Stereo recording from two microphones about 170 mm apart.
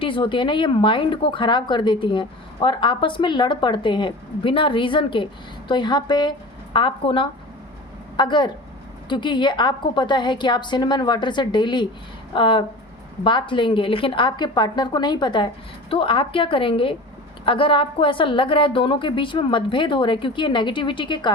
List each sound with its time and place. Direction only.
0.0 s a woman's voice: 30° left (ahead or behind)